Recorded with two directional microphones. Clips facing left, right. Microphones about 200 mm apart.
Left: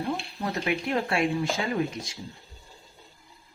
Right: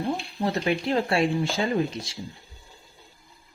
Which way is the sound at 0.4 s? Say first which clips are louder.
Right 4 dB; 30° right (ahead or behind).